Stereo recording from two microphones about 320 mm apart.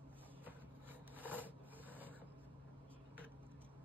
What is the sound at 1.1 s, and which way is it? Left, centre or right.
Filing, centre.